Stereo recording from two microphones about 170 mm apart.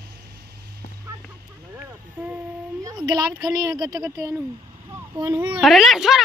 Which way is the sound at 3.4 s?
20° right (ahead or behind).